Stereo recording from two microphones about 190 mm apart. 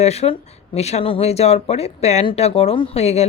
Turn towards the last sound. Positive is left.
turn(degrees=35)  # may be behind; listen again after turning